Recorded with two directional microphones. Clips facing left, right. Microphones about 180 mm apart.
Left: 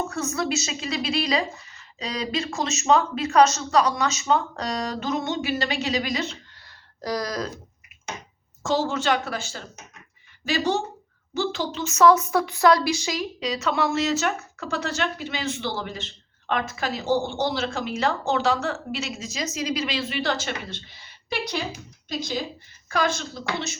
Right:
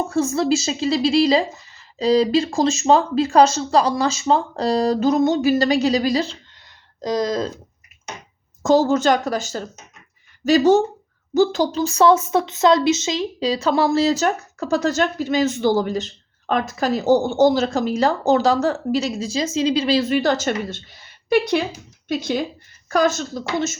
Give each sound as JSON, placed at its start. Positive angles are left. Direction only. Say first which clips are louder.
{"t": 0.1, "sound": "speech", "louder": "right 8 dB", "side_deg": -30}
{"t": 7.0, "sound": "speech", "louder": "right 6 dB", "side_deg": -20}
{"t": 8.6, "sound": "speech", "louder": "right 8 dB", "side_deg": -40}
{"t": 22.9, "sound": "speech", "louder": "right 6 dB", "side_deg": -45}